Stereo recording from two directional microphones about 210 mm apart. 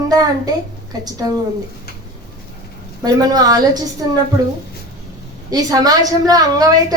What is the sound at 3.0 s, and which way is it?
A woman's voice, 20° right (ahead or behind).